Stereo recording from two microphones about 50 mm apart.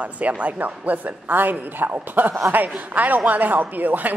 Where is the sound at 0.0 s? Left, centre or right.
Right.